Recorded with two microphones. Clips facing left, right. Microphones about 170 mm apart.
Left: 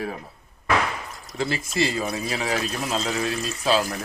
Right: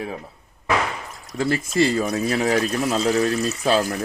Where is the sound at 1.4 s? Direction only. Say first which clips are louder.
Right 5 dB; 50° right (ahead or behind).